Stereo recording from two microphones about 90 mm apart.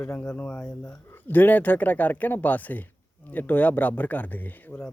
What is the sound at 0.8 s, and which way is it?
Speech, 25° left (ahead or behind).